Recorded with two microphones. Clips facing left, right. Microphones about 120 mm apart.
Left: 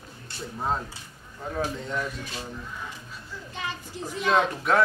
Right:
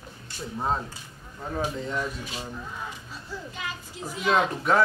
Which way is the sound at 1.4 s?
5° right (ahead or behind).